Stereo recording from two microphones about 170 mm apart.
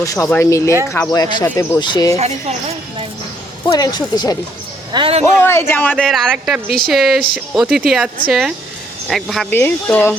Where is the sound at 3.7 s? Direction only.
20° left (ahead or behind).